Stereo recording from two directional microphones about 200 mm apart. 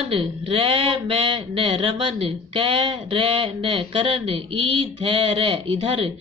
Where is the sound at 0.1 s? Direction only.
30° right (ahead or behind).